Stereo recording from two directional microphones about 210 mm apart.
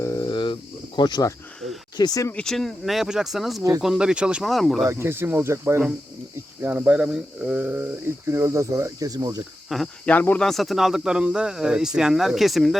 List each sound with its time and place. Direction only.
0.0 s a sound: 15° left (ahead or behind)
0.9 s speech: 20° left (ahead or behind)
2.3 s speech: 5° left (ahead or behind)
4.9 s speech: 10° right (ahead or behind)
9.6 s speech: centre (ahead or behind)